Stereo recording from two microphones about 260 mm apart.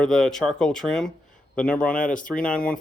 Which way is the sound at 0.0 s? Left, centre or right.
Centre.